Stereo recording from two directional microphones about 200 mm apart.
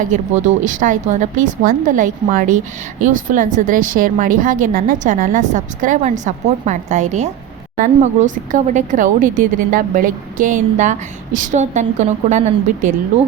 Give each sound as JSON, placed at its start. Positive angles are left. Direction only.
{"t": 0.0, "sound": "speech", "side_deg": -40}